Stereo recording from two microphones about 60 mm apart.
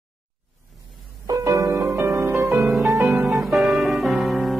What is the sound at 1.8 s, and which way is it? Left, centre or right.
Music, right.